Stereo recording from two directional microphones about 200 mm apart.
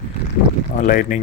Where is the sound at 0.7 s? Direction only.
45° left (ahead or behind).